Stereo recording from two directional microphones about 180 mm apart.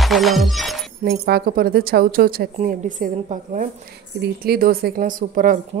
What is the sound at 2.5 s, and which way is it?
Speech, 45° right (ahead or behind).